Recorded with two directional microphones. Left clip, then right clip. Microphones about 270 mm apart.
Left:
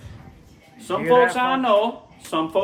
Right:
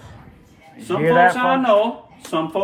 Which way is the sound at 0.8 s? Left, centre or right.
Centre.